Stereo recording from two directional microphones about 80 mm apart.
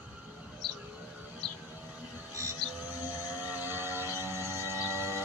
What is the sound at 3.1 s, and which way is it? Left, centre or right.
Vehicle, right.